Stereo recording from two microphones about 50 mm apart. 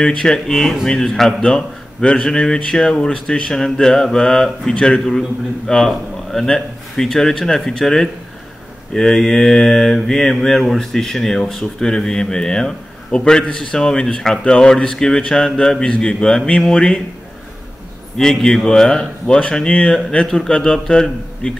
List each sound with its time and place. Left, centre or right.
0.0 s a man's voice: centre
8.9 s mantra: centre
10.6 s a man's voice: centre
18.1 s a man's voice: centre